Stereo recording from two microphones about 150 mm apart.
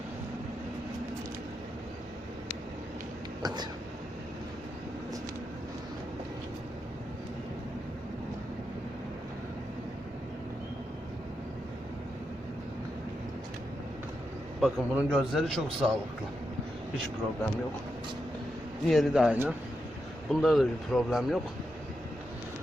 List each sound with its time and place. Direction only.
3.4 s speech: 30° right (ahead or behind)
14.6 s a man's voice: 5° right (ahead or behind)
18.9 s a man's voice: centre (ahead or behind)